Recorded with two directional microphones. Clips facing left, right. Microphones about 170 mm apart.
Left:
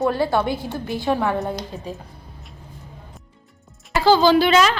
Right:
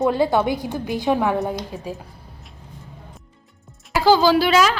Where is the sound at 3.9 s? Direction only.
10° right (ahead or behind).